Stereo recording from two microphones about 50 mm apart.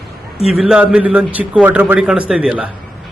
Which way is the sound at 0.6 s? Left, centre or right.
Centre.